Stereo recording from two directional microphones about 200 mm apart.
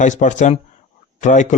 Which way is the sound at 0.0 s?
40° left (ahead or behind).